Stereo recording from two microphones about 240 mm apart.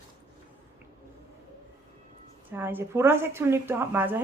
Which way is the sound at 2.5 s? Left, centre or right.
Centre.